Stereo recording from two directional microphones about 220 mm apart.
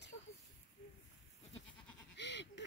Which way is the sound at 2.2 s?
55° left (ahead or behind).